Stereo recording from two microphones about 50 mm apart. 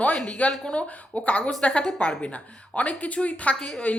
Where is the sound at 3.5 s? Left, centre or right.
Centre.